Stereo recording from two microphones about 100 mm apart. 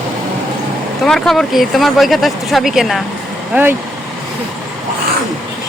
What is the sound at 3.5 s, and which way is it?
Speech, 20° right (ahead or behind).